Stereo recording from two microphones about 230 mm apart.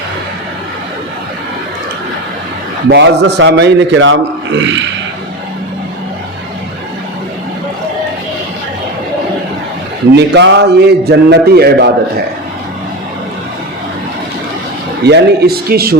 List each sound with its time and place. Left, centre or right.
2.9 s a man's voice: right
10.2 s a man's voice: right
15.0 s a man's voice: right